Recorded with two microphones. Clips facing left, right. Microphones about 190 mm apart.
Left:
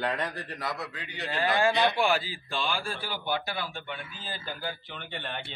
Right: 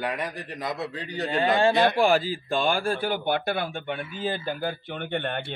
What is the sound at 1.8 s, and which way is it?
Speech, 40° right (ahead or behind).